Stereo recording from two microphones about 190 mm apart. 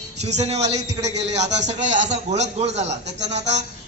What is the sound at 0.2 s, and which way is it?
A man's voice, 35° right (ahead or behind).